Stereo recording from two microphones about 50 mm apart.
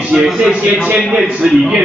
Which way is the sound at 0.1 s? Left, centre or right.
Centre.